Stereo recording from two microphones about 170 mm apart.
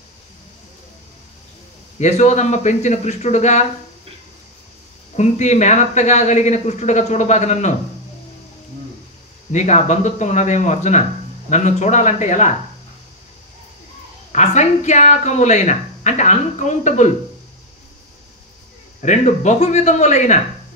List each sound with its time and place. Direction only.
2.0 s speech: 45° left (ahead or behind)
5.1 s speech: 45° left (ahead or behind)
9.5 s speech: 40° left (ahead or behind)
14.3 s speech: 45° left (ahead or behind)
18.9 s speech: 45° left (ahead or behind)